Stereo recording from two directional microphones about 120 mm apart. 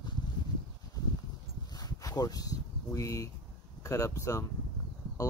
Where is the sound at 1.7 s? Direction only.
35° left (ahead or behind).